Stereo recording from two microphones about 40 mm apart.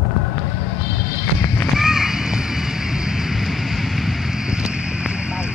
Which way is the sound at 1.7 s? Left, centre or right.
Centre.